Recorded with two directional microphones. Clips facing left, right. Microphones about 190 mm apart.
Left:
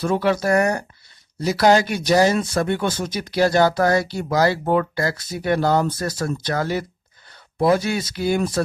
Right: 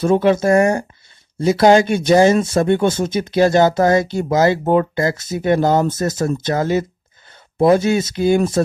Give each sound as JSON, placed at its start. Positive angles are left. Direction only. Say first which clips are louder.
{"t": 0.0, "sound": "speech", "louder": "right 6 dB", "side_deg": -25}